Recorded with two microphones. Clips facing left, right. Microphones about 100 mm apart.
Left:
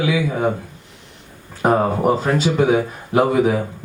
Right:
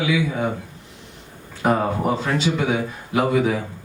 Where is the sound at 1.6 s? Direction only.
35° left (ahead or behind).